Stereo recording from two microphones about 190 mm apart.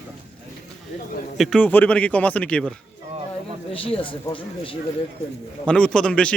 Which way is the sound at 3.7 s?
30° left (ahead or behind).